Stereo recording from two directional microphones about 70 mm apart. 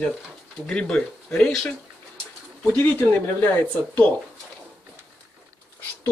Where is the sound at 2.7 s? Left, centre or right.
Left.